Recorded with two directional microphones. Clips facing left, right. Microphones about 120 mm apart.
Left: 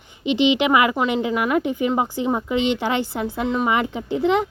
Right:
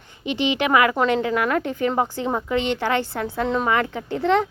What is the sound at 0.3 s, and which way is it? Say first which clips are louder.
A woman's voice: left 3 dB; 20° left (ahead or behind).